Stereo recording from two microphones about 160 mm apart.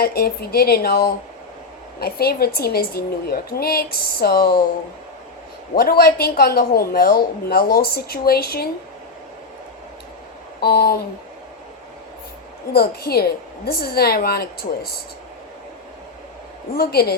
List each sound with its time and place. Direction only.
0.0 s speech: 75° left (ahead or behind)
5.7 s speech: 75° left (ahead or behind)
10.6 s speech: 75° left (ahead or behind)
12.7 s speech: 75° left (ahead or behind)
16.7 s speech: 75° left (ahead or behind)